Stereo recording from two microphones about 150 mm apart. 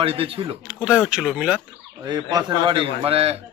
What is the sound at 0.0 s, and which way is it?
Speech, 40° right (ahead or behind).